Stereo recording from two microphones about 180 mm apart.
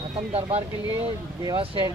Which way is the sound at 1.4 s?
25° right (ahead or behind).